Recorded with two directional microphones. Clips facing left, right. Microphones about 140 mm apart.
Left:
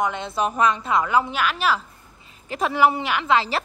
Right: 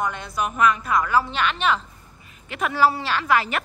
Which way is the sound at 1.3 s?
5° left (ahead or behind).